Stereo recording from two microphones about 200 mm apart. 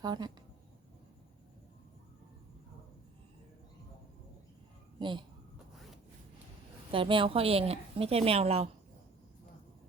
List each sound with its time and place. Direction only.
0.0 s speech: 20° right (ahead or behind)
4.9 s speech: 25° right (ahead or behind)
6.9 s a woman's voice: 25° right (ahead or behind)